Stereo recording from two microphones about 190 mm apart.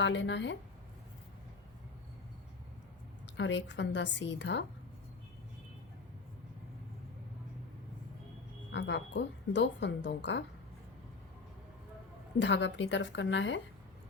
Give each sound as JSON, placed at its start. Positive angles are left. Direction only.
{"t": 0.0, "sound": "speech", "side_deg": 75}
{"t": 3.3, "sound": "speech", "side_deg": 80}
{"t": 8.7, "sound": "speech", "side_deg": 70}
{"t": 12.4, "sound": "speech", "side_deg": 70}